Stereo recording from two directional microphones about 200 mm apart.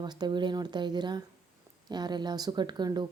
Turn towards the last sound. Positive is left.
turn(degrees=-20)  # may be behind; listen again after turning